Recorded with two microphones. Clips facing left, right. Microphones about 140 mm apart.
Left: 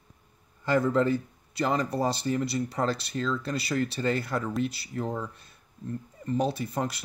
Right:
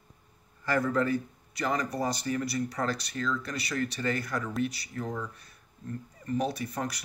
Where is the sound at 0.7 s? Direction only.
25° left (ahead or behind).